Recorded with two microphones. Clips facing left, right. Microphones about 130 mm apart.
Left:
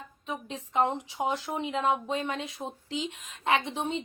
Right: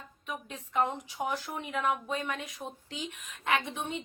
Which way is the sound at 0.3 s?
25° left (ahead or behind).